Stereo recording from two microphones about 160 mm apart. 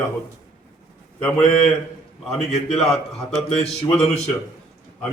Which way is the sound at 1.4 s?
40° left (ahead or behind).